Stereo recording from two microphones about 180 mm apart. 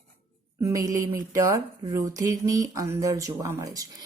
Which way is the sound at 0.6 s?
20° right (ahead or behind).